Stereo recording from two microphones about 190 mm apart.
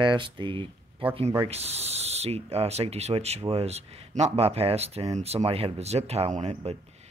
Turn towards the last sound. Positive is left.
turn(degrees=-30)  # may be behind; listen again after turning